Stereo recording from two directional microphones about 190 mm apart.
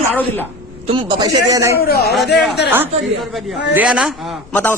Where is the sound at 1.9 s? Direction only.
55° left (ahead or behind).